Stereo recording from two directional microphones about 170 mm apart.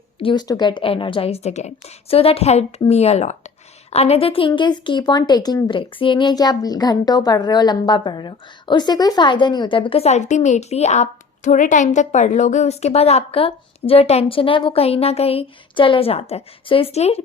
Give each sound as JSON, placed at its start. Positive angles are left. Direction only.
{"t": 0.2, "sound": "a woman's voice", "side_deg": 30}